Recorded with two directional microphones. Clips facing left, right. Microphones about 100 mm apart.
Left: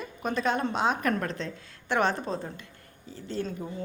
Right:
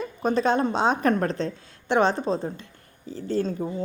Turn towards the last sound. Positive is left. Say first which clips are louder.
# right 7 dB
turn(degrees=-35)  # may be behind; listen again after turning